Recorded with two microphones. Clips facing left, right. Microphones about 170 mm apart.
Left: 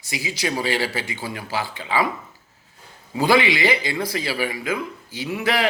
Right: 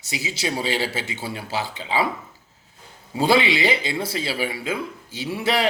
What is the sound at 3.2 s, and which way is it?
A man's voice, 25° right (ahead or behind).